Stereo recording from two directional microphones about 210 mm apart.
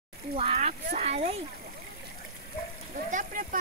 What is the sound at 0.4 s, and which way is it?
Speech, 30° right (ahead or behind).